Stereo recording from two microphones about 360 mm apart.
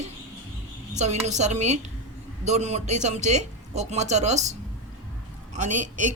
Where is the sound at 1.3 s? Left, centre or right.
Centre.